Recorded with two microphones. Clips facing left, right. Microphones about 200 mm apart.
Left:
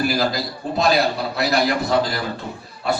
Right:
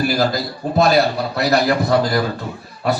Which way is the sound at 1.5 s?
50° right (ahead or behind).